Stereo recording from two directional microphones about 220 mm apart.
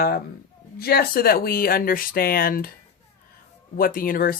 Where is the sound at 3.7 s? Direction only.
40° left (ahead or behind).